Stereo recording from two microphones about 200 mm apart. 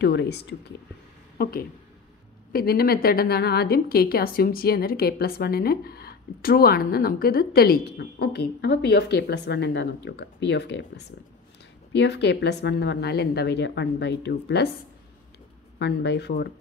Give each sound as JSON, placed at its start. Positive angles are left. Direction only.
{"t": 0.0, "sound": "a woman's voice", "side_deg": 55}
{"t": 2.5, "sound": "a woman's voice", "side_deg": 50}
{"t": 15.8, "sound": "a woman's voice", "side_deg": 60}